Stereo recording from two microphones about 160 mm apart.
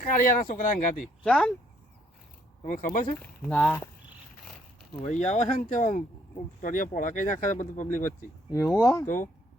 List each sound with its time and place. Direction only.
0.0 s speech: 60° left (ahead or behind)
1.2 s speech: 5° left (ahead or behind)
2.6 s speech: 60° left (ahead or behind)
3.2 s speech: 10° left (ahead or behind)
4.9 s speech: 45° left (ahead or behind)
8.4 s speech: 20° left (ahead or behind)